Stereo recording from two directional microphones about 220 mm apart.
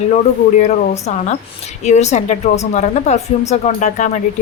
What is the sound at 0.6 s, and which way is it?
A woman's voice, 35° left (ahead or behind).